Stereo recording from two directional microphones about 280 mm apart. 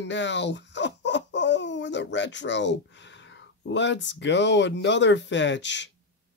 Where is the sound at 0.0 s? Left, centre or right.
Left.